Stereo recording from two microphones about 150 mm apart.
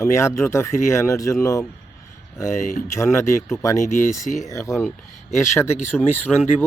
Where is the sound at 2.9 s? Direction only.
20° left (ahead or behind).